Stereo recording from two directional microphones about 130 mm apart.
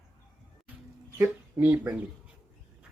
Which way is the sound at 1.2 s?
15° right (ahead or behind).